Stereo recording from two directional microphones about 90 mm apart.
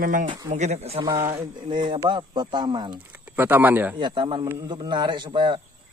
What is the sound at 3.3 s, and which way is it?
Speech, 20° right (ahead or behind).